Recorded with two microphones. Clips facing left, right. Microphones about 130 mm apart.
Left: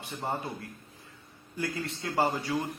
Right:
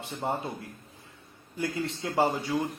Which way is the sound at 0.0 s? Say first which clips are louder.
Right 3 dB; 20° right (ahead or behind).